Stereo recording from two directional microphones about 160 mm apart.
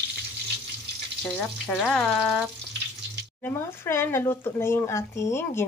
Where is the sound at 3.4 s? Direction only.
15° left (ahead or behind).